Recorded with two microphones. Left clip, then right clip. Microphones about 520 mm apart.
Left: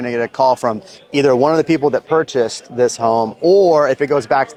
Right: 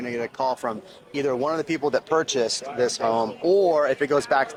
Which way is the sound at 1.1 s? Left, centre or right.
Left.